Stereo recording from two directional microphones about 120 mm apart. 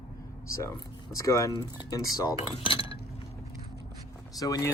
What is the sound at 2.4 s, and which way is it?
Speech, 50° left (ahead or behind).